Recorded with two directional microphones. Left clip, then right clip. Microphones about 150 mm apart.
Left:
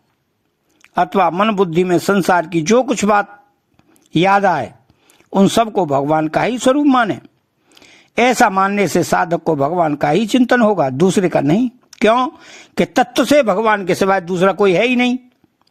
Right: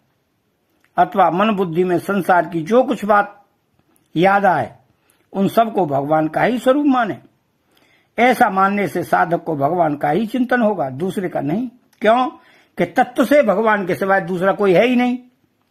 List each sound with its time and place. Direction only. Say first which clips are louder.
0.8 s speech: even; 35° left (ahead or behind)